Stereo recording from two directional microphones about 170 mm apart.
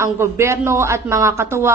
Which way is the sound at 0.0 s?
15° right (ahead or behind).